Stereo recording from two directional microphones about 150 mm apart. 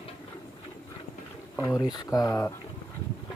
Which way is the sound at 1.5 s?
20° left (ahead or behind).